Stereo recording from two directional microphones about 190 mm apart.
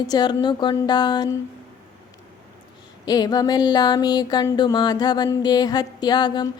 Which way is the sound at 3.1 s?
20° left (ahead or behind).